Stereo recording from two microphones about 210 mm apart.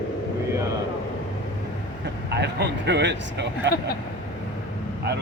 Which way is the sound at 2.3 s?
55° right (ahead or behind).